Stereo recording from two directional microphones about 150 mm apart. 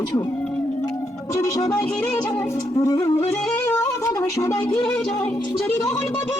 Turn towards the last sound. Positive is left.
turn(degrees=10)  # may be behind; listen again after turning